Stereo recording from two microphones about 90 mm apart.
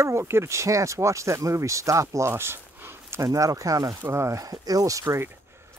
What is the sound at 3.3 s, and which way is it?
Speech, 35° right (ahead or behind).